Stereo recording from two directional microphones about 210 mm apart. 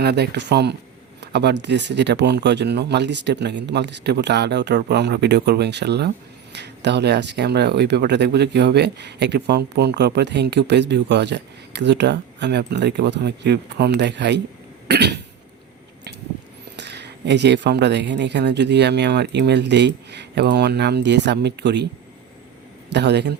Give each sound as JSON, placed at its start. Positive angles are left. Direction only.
{"t": 0.0, "sound": "speech", "side_deg": -50}
{"t": 1.2, "sound": "a sound", "side_deg": -55}
{"t": 1.6, "sound": "speech", "side_deg": -55}
{"t": 14.8, "sound": "cough", "side_deg": -55}
{"t": 16.7, "sound": "speech", "side_deg": -55}
{"t": 22.9, "sound": "speech", "side_deg": -55}